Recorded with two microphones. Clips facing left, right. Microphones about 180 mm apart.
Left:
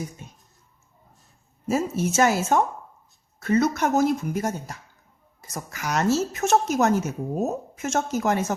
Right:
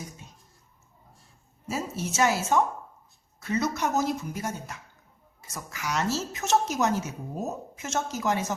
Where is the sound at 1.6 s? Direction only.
50° left (ahead or behind).